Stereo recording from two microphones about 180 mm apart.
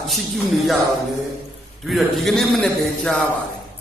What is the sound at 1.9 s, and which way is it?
A man's voice, centre (ahead or behind).